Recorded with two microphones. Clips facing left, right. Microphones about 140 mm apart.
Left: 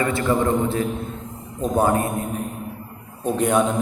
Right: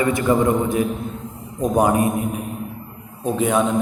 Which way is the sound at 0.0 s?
15° right (ahead or behind).